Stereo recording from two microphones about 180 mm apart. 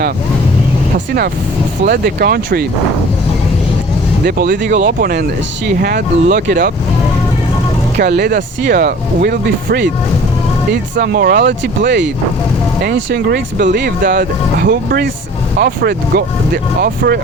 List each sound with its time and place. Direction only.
0.9 s speech: 60° right (ahead or behind)
4.3 s speech: 60° right (ahead or behind)
7.9 s speech: 65° right (ahead or behind)
8.6 s speech: 55° right (ahead or behind); by 12.1 s 75° right (ahead or behind)
12.8 s speech: 60° right (ahead or behind)